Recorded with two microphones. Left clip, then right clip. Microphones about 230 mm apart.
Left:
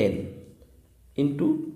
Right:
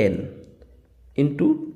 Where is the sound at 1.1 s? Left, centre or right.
Right.